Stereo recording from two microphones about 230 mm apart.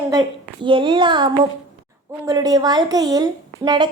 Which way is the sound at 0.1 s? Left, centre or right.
Centre.